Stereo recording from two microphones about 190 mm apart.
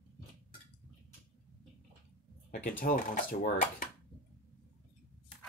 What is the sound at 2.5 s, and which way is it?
Speech, 45° left (ahead or behind).